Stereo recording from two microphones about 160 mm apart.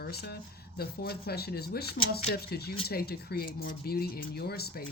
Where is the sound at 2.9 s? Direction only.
70° left (ahead or behind).